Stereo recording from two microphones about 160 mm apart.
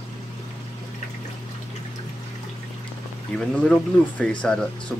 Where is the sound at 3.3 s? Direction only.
5° left (ahead or behind).